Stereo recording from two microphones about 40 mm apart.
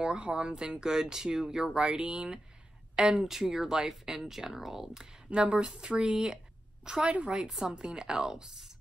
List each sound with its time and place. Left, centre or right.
0.0 s speech: right; by 5.0 s centre
5.3 s a woman's voice: right
7.1 s a woman's voice: right
7.4 s speech: centre